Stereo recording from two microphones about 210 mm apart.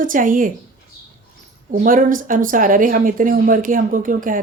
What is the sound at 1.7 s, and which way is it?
Speech, 40° right (ahead or behind).